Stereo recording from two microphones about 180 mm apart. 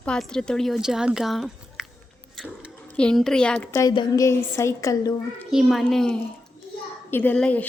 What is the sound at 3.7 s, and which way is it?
A woman's voice, 20° left (ahead or behind).